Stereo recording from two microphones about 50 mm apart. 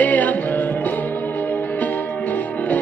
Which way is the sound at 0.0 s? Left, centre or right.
Left.